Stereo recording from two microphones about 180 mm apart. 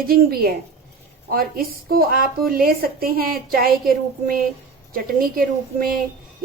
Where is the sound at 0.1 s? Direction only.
55° right (ahead or behind).